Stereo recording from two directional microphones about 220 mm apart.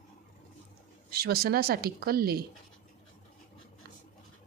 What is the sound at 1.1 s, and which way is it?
A woman's voice, 45° right (ahead or behind).